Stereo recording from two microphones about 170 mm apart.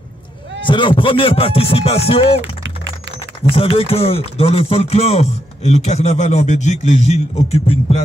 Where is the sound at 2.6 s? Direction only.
90° right.